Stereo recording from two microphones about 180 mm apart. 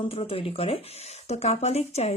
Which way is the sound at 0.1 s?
30° left (ahead or behind).